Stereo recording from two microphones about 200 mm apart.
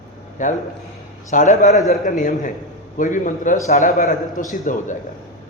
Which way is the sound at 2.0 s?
40° left (ahead or behind).